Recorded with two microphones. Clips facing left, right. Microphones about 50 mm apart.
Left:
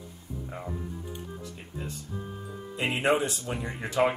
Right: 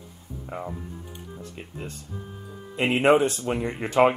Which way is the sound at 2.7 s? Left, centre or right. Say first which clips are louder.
Right 6 dB; right.